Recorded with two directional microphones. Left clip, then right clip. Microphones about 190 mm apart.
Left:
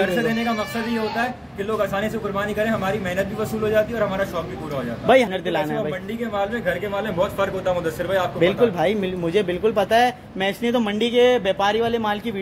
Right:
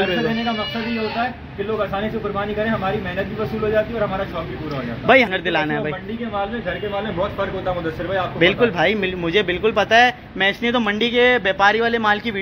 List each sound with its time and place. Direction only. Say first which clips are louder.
0.1 s speech: right 1 dB; 15° left (ahead or behind)
2.0 s a man's voice: right 1 dB; 10° left (ahead or behind)
5.0 s a man's voice: right 2 dB; 15° left (ahead or behind)
7.2 s a man's voice: left 1 dB; 10° left (ahead or behind)